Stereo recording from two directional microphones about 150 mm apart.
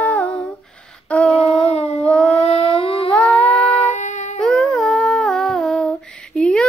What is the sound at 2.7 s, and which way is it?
Humming, 35° left (ahead or behind).